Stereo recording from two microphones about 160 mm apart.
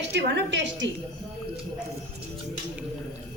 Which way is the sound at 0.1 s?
90° right.